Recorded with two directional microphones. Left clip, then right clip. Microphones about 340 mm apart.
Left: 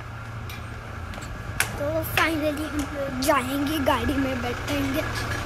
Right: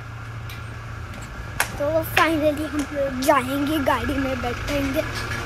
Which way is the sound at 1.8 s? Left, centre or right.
Centre.